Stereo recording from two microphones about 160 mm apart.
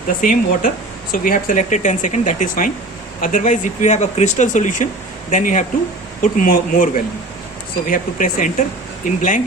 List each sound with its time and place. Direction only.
0.2 s speech: 60° left (ahead or behind)